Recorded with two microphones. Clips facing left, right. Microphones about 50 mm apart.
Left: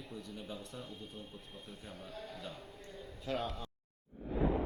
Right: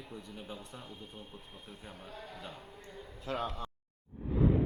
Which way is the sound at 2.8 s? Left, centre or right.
Centre.